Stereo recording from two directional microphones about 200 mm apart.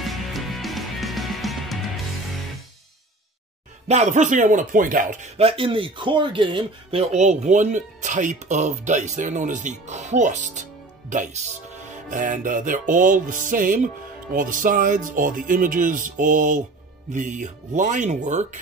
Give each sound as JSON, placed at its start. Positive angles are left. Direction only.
{"t": 0.0, "sound": "music", "side_deg": 0}
{"t": 3.8, "sound": "speech", "side_deg": -35}
{"t": 14.3, "sound": "music", "side_deg": -45}
{"t": 17.1, "sound": "speech", "side_deg": -40}